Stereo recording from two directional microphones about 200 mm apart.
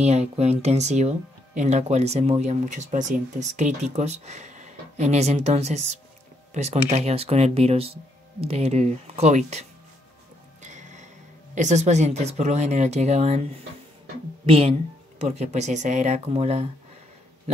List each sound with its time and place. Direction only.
0.0 s speech: 35° right (ahead or behind)
10.6 s music: 35° right (ahead or behind)
11.5 s speech: 35° right (ahead or behind)